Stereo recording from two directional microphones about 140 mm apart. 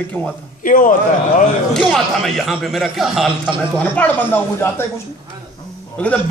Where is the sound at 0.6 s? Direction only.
70° left (ahead or behind).